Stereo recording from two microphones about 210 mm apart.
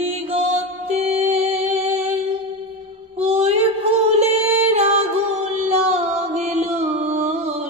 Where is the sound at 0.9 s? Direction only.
30° right (ahead or behind).